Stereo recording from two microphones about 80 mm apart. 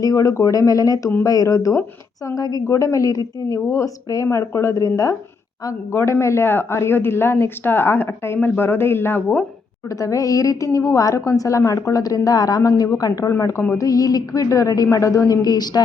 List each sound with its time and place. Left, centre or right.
0.0 s a woman's voice: left
10.0 s a woman's voice: left
13.3 s a woman's voice: left
13.7 s a woman's voice: left